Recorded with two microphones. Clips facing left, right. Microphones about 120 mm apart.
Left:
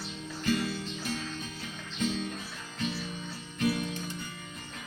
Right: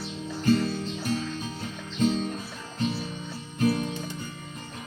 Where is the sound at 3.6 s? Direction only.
35° right (ahead or behind).